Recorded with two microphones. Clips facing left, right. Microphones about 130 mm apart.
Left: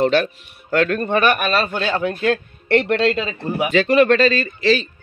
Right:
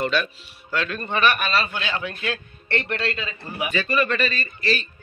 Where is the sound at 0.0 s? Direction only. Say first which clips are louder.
Left 7 dB; 65° left (ahead or behind).